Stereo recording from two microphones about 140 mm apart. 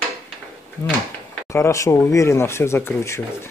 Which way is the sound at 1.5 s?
20° left (ahead or behind).